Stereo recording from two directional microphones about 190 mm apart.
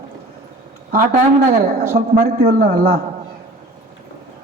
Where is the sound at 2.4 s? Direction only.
50° right (ahead or behind).